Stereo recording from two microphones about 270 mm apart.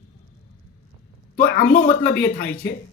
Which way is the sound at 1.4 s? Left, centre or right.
Left.